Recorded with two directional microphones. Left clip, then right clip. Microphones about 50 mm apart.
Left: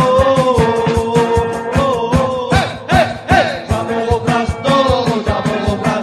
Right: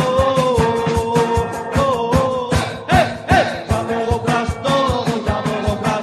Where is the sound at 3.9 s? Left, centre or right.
Left.